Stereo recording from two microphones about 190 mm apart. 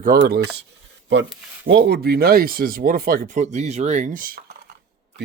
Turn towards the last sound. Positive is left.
turn(degrees=-50)  # may be behind; listen again after turning